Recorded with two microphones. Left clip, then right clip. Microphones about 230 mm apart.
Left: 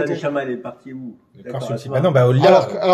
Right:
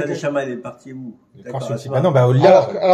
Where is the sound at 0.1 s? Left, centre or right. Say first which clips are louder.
Even; right.